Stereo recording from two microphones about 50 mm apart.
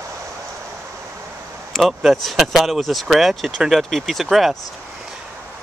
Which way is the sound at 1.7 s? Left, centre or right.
Centre.